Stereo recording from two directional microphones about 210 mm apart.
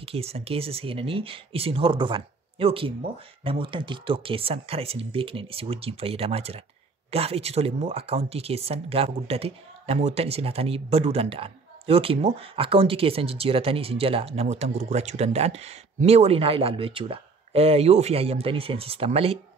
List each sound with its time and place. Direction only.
0.0 s speech: 30° right (ahead or behind)